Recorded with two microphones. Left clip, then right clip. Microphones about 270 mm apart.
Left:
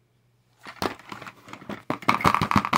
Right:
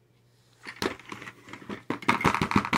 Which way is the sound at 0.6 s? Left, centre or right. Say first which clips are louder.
Left 2 dB; left.